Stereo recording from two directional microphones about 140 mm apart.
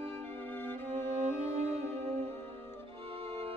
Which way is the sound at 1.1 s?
55° right (ahead or behind).